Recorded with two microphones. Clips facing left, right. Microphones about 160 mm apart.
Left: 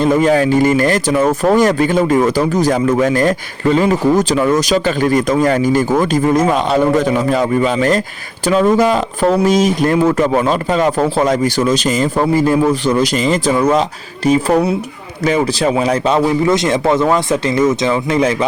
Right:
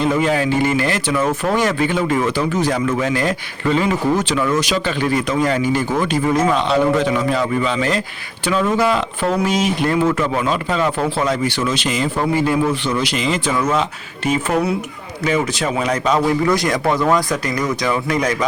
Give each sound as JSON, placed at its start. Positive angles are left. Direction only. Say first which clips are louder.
{"t": 0.0, "sound": "a man's voice", "louder": "left 5 dB", "side_deg": 40}